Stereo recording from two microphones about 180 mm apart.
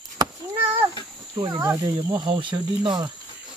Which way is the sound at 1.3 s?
25° right (ahead or behind).